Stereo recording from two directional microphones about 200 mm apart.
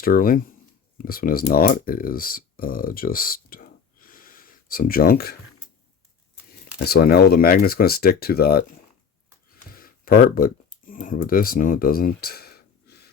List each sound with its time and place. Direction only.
0.0 s speech: 45° left (ahead or behind)
6.8 s speech: 50° left (ahead or behind)
9.7 s a sound: 45° left (ahead or behind)
11.3 s speech: 45° left (ahead or behind)